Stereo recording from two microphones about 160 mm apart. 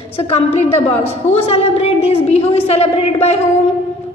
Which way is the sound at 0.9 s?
40° left (ahead or behind).